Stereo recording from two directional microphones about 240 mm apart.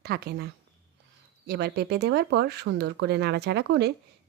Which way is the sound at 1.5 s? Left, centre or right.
Right.